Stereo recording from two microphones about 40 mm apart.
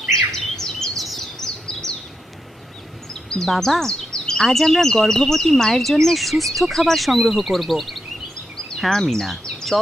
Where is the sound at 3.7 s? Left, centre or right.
Centre.